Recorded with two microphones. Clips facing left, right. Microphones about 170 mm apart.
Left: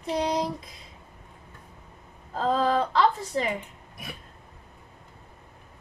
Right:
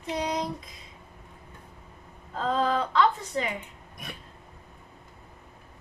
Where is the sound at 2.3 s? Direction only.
35° left (ahead or behind).